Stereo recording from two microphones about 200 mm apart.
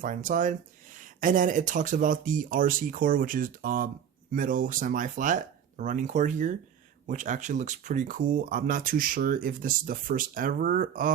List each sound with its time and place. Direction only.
0.0 s speech: 40° right (ahead or behind)